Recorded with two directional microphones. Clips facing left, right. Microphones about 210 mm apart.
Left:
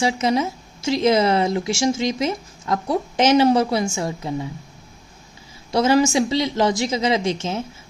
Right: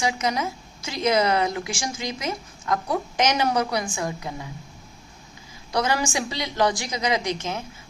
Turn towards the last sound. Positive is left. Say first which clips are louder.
# left 4 dB
turn(degrees=25)  # may be behind; listen again after turning